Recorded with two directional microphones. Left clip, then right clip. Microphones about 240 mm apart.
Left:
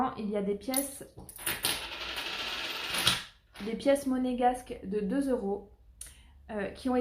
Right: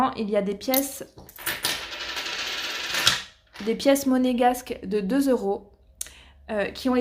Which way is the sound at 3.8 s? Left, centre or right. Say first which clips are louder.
Right 6 dB; right.